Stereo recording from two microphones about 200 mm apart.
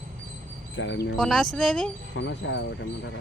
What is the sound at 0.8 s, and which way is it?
Speech, 65° left (ahead or behind).